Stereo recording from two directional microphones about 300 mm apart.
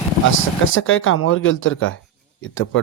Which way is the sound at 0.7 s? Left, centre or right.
Left.